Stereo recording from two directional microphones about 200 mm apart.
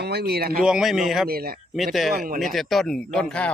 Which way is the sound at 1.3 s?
50° right (ahead or behind).